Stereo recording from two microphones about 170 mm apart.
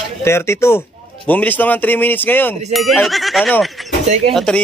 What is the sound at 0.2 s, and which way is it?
A man's voice, 15° left (ahead or behind).